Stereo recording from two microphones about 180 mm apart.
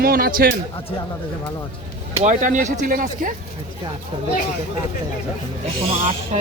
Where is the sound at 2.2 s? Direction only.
45° right (ahead or behind).